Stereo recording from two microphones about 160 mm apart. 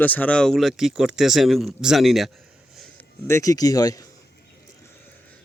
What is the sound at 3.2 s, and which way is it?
Speech, 20° left (ahead or behind).